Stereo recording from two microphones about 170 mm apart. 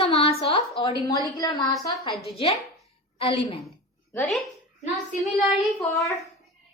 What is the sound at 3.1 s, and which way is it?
Speech, 35° left (ahead or behind).